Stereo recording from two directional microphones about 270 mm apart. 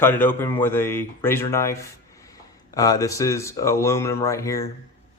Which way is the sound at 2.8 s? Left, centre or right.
Centre.